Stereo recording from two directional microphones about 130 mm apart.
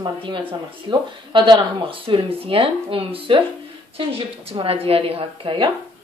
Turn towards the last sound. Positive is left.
turn(degrees=-40)  # may be behind; listen again after turning